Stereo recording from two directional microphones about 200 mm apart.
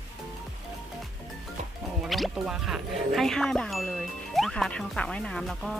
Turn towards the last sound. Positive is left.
turn(degrees=0)  # may be behind; listen again after turning